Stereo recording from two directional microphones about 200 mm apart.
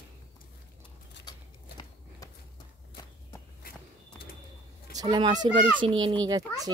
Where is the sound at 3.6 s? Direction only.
45° left (ahead or behind).